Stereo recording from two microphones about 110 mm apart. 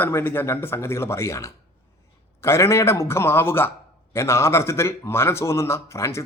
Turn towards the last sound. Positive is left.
turn(degrees=25)  # may be behind; listen again after turning